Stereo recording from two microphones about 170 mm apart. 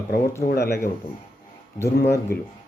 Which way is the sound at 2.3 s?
70° left (ahead or behind).